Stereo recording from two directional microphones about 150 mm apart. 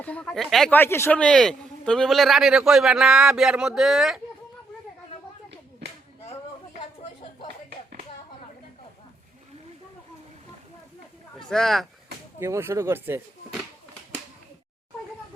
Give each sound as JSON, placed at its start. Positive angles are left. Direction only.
{"t": 0.0, "sound": "speech", "side_deg": 10}
{"t": 0.8, "sound": "a man's voice", "side_deg": 15}
{"t": 11.3, "sound": "speech", "side_deg": 5}
{"t": 12.4, "sound": "speech", "side_deg": -15}